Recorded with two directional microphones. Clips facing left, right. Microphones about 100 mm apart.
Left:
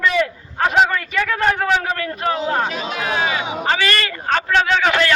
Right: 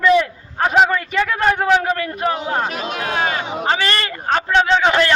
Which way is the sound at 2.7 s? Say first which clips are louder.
Even; 50° right (ahead or behind).